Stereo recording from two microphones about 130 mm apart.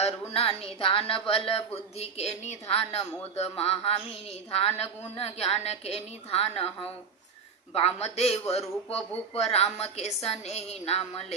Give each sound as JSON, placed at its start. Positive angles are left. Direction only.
{"t": 0.0, "sound": "speech", "side_deg": 50}